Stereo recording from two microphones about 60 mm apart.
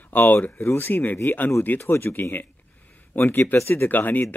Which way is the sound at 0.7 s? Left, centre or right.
Left.